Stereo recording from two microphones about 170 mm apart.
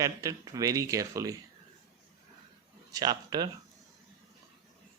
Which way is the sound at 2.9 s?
25° right (ahead or behind).